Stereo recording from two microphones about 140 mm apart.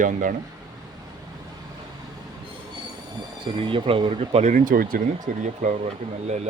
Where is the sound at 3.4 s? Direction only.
35° right (ahead or behind); by 5.0 s 85° right.